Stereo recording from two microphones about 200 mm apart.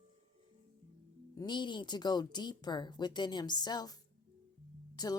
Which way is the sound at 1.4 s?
20° left (ahead or behind).